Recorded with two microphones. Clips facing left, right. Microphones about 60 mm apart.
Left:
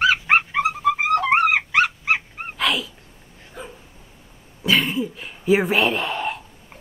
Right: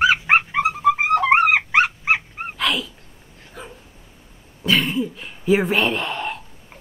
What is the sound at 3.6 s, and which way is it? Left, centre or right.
Dog, centre.